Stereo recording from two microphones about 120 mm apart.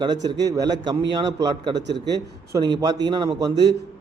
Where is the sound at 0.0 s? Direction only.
40° right (ahead or behind).